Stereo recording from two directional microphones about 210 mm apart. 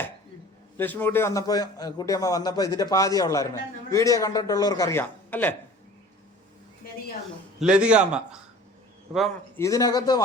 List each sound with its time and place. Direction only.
0.8 s a man's voice: 10° left (ahead or behind)
7.6 s a man's voice: 5° right (ahead or behind)
9.6 s a man's voice: 15° left (ahead or behind)